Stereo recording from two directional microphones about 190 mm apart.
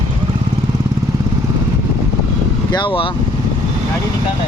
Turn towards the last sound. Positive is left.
turn(degrees=25)  # may be behind; listen again after turning